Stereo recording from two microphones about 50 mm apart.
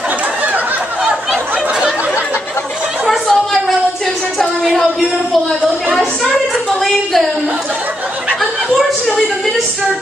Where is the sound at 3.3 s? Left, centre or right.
Centre.